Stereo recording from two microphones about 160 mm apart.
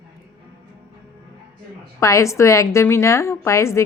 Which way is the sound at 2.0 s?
20° left (ahead or behind).